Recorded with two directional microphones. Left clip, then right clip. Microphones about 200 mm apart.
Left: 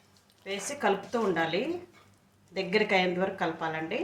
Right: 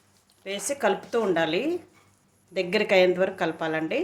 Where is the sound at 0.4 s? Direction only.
55° right (ahead or behind).